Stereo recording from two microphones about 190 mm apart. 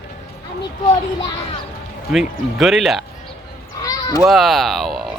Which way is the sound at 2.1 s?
Centre (ahead or behind).